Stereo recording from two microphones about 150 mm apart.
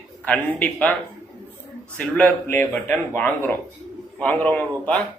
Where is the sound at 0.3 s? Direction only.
10° left (ahead or behind).